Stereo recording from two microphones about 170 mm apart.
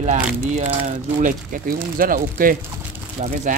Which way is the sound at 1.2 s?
55° right (ahead or behind).